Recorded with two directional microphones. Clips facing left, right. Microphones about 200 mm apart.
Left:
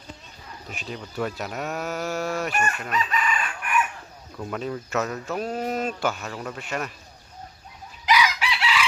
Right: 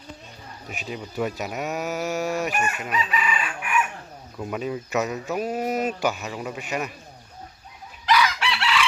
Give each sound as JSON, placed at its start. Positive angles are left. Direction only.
{"t": 0.7, "sound": "speech", "side_deg": -5}
{"t": 2.0, "sound": "speech", "side_deg": -15}
{"t": 2.5, "sound": "chicken", "side_deg": -15}
{"t": 4.4, "sound": "speech", "side_deg": -10}
{"t": 5.0, "sound": "mantra", "side_deg": -15}
{"t": 6.0, "sound": "speech", "side_deg": -15}
{"t": 8.0, "sound": "chicken", "side_deg": 10}